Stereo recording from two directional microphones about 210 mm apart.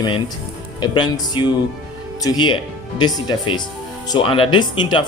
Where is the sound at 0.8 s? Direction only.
20° left (ahead or behind).